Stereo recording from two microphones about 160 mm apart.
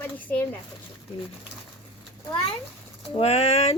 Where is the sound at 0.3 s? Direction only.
15° left (ahead or behind).